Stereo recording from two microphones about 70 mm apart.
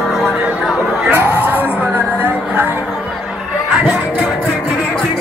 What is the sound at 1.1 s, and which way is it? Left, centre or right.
Music, right.